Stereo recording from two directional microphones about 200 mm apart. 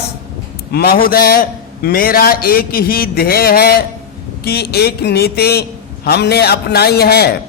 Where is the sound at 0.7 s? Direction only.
50° left (ahead or behind).